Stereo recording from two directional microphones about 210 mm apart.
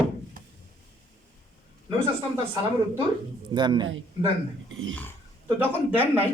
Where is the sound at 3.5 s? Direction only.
20° right (ahead or behind).